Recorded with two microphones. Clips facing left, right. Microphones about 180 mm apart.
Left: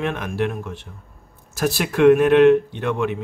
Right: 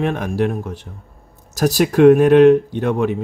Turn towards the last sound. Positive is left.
turn(degrees=-40)  # may be behind; listen again after turning